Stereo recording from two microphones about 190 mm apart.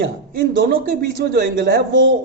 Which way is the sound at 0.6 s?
50° right (ahead or behind).